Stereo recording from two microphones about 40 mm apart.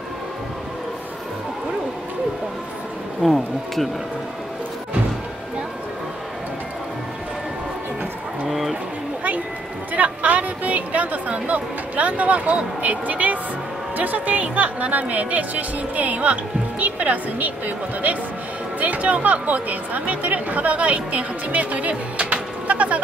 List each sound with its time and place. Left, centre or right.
3.2 s speech: centre
8.5 s a sound: centre
9.9 s speech: right